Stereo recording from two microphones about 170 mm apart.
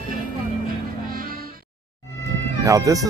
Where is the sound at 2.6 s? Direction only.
20° right (ahead or behind).